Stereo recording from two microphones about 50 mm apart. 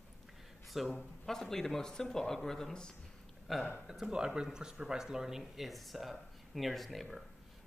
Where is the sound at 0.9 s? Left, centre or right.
Centre.